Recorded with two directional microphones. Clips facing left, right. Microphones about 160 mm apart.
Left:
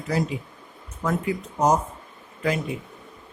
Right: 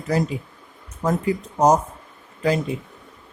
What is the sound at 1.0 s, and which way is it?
Speech, 35° right (ahead or behind).